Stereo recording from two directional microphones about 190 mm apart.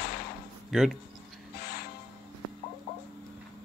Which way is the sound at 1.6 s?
50° left (ahead or behind).